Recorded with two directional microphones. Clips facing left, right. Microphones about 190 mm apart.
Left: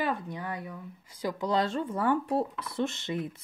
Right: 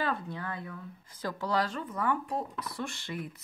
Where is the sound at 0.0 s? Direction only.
15° left (ahead or behind).